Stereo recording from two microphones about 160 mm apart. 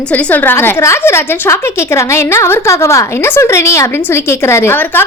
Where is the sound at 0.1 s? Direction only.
10° left (ahead or behind).